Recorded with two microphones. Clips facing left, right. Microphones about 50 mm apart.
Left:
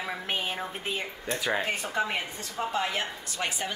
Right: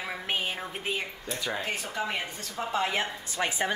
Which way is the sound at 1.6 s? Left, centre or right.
Left.